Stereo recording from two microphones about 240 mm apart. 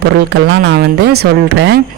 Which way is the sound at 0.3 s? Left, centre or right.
Right.